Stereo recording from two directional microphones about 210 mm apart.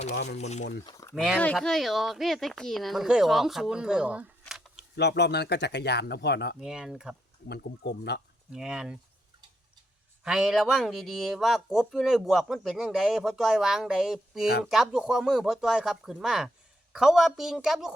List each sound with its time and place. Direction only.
0.3 s speech: 35° left (ahead or behind)
0.9 s speech: 15° left (ahead or behind)
1.1 s speech: centre (ahead or behind)
4.9 s speech: 55° left (ahead or behind)
6.6 s speech: centre (ahead or behind)
7.4 s speech: 50° left (ahead or behind)
8.5 s speech: 5° right (ahead or behind)
10.2 s speech: 5° right (ahead or behind)